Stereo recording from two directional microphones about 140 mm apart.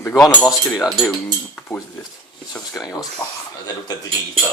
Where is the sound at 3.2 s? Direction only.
10° left (ahead or behind).